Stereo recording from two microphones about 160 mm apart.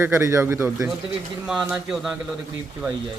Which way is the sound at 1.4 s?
5° right (ahead or behind).